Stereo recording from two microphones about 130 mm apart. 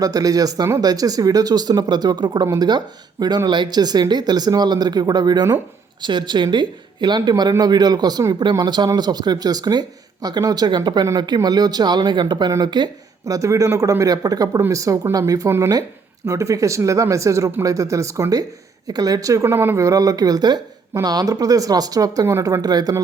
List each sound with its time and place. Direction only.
0.0 s a woman's voice: 30° right (ahead or behind)